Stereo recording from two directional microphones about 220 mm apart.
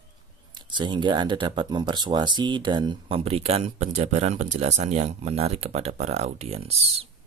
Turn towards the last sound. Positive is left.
turn(degrees=-30)  # may be behind; listen again after turning